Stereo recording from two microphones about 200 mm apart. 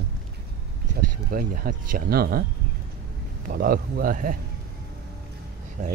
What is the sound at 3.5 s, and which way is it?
Speech, 45° right (ahead or behind).